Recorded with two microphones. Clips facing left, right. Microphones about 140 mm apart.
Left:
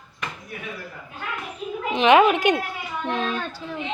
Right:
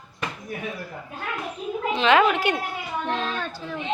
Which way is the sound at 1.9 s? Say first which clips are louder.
Left 3 dB; 20° left (ahead or behind).